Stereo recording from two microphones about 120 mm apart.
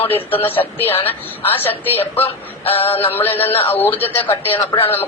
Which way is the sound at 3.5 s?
55° left (ahead or behind).